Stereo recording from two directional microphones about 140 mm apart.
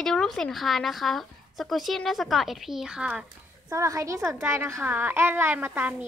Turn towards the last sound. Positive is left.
turn(degrees=-15)  # may be behind; listen again after turning